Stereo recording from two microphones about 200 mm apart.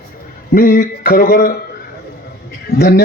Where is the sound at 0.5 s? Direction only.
50° left (ahead or behind).